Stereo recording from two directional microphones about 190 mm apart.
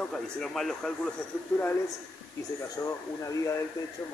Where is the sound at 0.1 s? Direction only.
Centre (ahead or behind).